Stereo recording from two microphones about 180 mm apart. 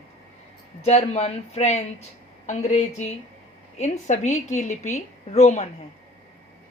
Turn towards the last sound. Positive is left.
turn(degrees=40)  # may be behind; listen again after turning